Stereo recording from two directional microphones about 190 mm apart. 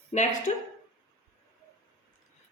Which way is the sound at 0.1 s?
40° left (ahead or behind).